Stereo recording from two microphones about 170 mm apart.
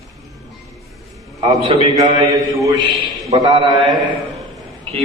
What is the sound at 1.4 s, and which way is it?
Speech, 30° right (ahead or behind).